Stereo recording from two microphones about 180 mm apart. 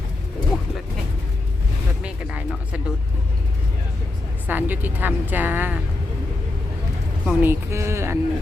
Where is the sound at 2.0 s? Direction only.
5° right (ahead or behind).